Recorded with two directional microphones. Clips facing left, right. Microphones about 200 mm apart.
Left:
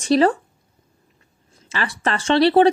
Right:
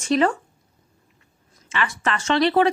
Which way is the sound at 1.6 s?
35° left (ahead or behind).